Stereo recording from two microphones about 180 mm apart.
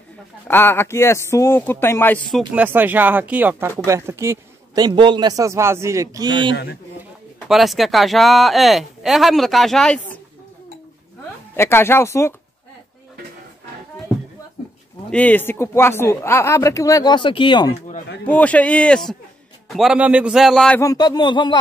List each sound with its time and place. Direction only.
0.5 s speech: 10° left (ahead or behind)
2.3 s speech: 10° right (ahead or behind)
6.5 s a man's voice: 70° left (ahead or behind)
7.0 s speech: centre (ahead or behind)
11.5 s speech: 15° left (ahead or behind)
15.0 s speech: 10° left (ahead or behind); by 17.7 s 25° left (ahead or behind)
18.2 s a man's voice: 10° left (ahead or behind)
20.8 s speech: 20° left (ahead or behind)